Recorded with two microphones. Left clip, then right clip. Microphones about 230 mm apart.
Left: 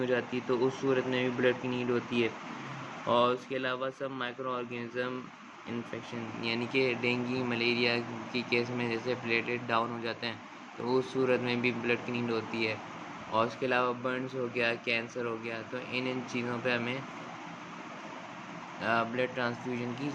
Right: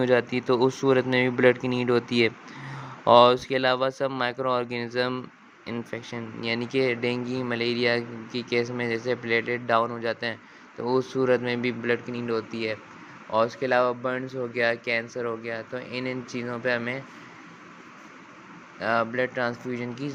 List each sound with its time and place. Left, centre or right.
0.0 s speech: right
18.8 s speech: right